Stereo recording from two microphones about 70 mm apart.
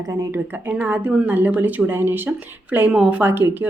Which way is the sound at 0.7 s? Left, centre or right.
Right.